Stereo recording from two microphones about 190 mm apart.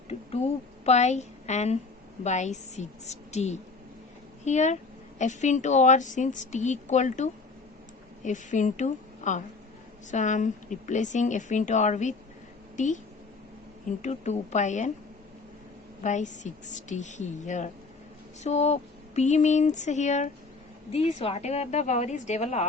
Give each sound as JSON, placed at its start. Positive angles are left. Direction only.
{"t": 0.1, "sound": "a woman's voice", "side_deg": 30}
{"t": 14.0, "sound": "a woman's voice", "side_deg": 35}
{"t": 16.0, "sound": "a woman's voice", "side_deg": 40}